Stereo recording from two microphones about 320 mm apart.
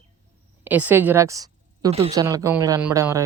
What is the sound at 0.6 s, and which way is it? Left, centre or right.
A woman's voice, centre.